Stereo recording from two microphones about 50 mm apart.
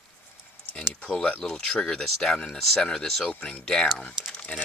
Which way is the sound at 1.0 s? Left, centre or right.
Left.